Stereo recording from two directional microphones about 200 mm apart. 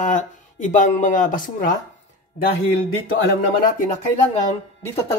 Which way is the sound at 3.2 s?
45° left (ahead or behind).